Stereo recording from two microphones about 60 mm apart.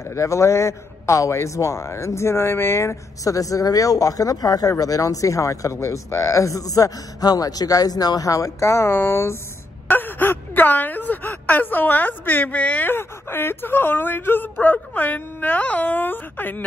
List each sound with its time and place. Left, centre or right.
0.1 s a man's voice: left
3.3 s speech: left
8.5 s a man's voice: left
9.8 s speech: left